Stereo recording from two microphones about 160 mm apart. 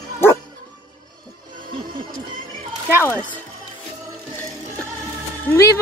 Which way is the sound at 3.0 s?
15° left (ahead or behind).